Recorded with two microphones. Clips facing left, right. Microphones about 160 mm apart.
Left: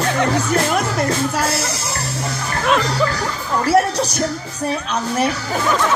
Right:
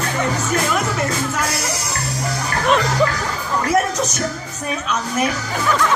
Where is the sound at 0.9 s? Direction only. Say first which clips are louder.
Left 3 dB; 30° left (ahead or behind).